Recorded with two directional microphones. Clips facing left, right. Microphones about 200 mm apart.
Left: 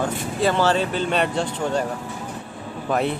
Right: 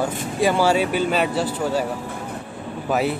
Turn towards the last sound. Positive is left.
turn(degrees=-5)  # may be behind; listen again after turning